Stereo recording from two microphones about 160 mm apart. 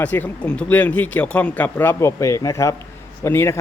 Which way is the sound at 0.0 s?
10° left (ahead or behind).